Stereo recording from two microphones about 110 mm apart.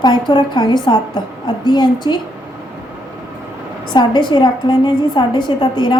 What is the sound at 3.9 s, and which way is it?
A woman's voice, 40° left (ahead or behind).